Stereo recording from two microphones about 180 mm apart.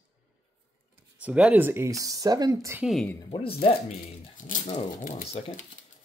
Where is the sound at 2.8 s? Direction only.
Centre (ahead or behind).